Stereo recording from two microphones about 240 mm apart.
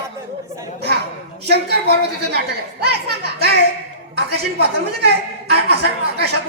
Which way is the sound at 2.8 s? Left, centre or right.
Right.